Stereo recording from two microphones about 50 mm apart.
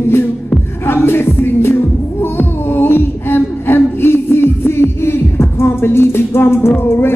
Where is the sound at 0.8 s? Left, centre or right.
Left.